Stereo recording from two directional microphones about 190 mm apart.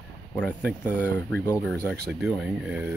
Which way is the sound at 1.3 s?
10° left (ahead or behind).